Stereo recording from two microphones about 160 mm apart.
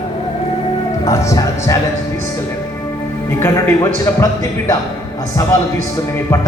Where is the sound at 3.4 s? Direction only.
20° left (ahead or behind).